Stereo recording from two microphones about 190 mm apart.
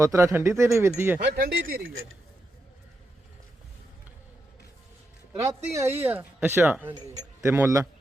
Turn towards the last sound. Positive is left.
turn(degrees=-15)  # may be behind; listen again after turning